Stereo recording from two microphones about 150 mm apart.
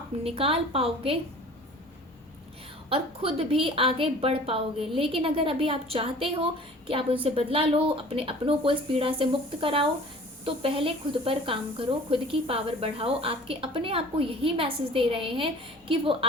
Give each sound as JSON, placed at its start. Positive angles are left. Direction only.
{"t": 0.3, "sound": "speech", "side_deg": -40}
{"t": 2.9, "sound": "speech", "side_deg": -40}